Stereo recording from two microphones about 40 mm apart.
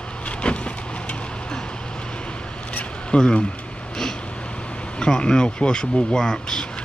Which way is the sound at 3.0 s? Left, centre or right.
Left.